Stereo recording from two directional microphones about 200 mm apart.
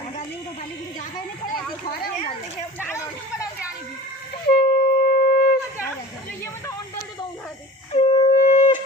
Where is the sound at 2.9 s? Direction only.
15° left (ahead or behind).